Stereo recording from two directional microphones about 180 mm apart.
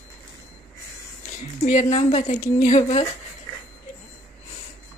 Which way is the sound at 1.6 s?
40° left (ahead or behind).